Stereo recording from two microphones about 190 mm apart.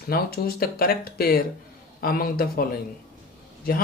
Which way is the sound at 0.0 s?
55° left (ahead or behind).